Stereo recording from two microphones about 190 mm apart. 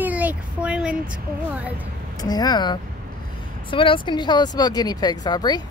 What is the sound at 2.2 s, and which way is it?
Speech, 20° left (ahead or behind).